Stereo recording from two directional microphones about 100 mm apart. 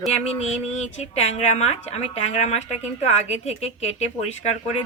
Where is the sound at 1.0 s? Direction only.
90° left.